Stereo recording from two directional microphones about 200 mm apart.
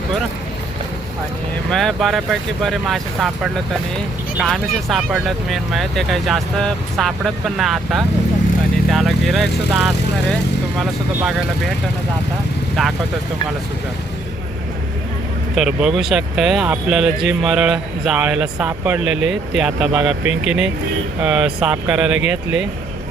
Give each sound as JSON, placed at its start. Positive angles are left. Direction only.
{"t": 1.7, "sound": "speech", "side_deg": 0}
{"t": 12.8, "sound": "speech", "side_deg": 0}
{"t": 15.5, "sound": "speech", "side_deg": -5}